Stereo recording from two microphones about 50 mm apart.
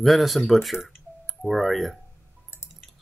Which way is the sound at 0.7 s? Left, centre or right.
Left.